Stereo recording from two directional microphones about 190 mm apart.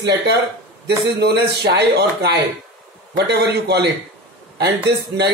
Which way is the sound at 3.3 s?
60° right (ahead or behind).